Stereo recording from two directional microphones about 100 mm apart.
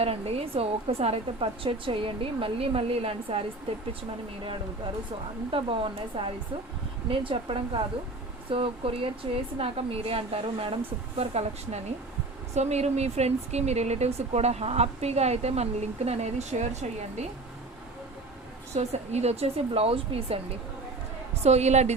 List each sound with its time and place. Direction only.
0.0 s a woman's voice: 90° right; by 3.4 s 70° right (ahead or behind)
5.5 s a woman's voice: 65° right (ahead or behind)
11.2 s speech: 90° right
18.8 s speech: 90° right; by 20.4 s 75° right (ahead or behind)
21.4 s speech: 90° right